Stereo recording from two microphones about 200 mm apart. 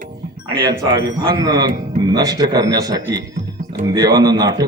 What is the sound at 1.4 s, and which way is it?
A man's voice, 20° right (ahead or behind).